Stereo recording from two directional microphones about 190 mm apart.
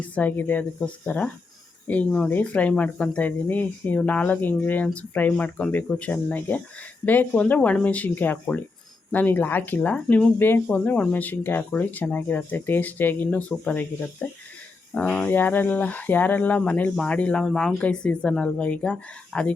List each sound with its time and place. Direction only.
0.1 s speech: 10° left (ahead or behind)